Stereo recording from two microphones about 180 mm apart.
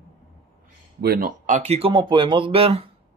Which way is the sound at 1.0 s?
55° right (ahead or behind).